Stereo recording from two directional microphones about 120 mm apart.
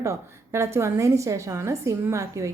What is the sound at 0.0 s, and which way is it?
A woman's voice, 25° right (ahead or behind).